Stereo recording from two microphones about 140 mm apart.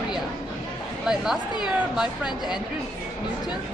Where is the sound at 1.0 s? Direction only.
5° right (ahead or behind).